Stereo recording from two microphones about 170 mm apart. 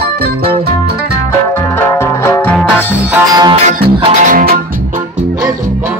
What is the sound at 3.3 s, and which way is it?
Music, 20° right (ahead or behind).